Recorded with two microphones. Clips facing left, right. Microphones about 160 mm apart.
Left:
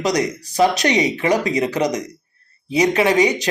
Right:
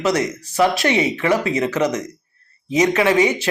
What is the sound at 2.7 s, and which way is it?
Speech, 35° left (ahead or behind).